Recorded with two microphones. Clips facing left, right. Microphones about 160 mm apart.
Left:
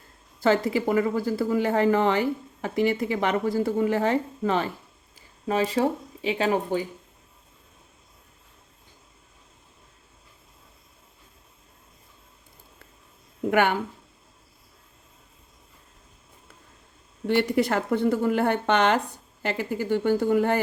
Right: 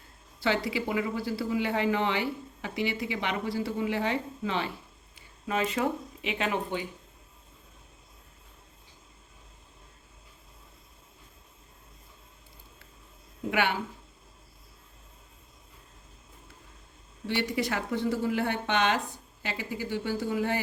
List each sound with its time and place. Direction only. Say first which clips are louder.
0.4 s speech: left 7 dB; 45° left (ahead or behind)
5.5 s speech: left 5 dB; 35° left (ahead or behind)
13.5 s speech: left 6 dB; 50° left (ahead or behind)
17.2 s speech: left 7 dB; 50° left (ahead or behind)